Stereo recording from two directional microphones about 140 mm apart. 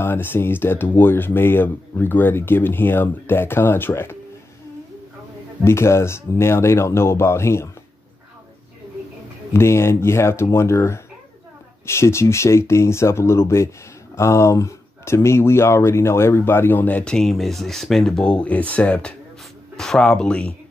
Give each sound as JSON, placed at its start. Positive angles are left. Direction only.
{"t": 0.0, "sound": "speech", "side_deg": 15}
{"t": 5.6, "sound": "speech", "side_deg": 20}
{"t": 9.5, "sound": "speech", "side_deg": 20}